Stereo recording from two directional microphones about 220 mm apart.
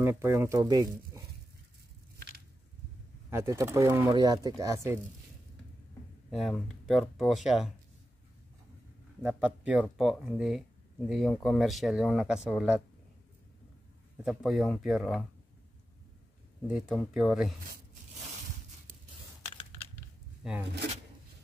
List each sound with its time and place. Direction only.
0.0 s speech: 10° right (ahead or behind)
2.1 s a sound: 45° right (ahead or behind)
3.3 s speech: 10° right (ahead or behind)
6.3 s speech: centre (ahead or behind)
9.2 s speech: 5° right (ahead or behind)
14.2 s speech: centre (ahead or behind)
16.6 s speech: 5° right (ahead or behind)
20.4 s speech: centre (ahead or behind)